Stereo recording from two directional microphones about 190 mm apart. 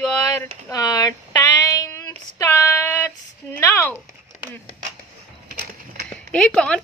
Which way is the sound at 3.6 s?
15° left (ahead or behind).